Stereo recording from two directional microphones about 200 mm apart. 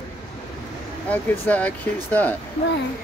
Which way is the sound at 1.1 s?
5° left (ahead or behind).